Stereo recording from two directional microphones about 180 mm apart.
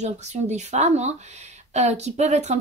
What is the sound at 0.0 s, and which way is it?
A woman's voice, 40° right (ahead or behind).